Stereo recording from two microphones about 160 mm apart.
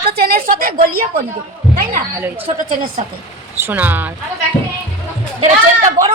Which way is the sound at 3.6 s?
10° right (ahead or behind).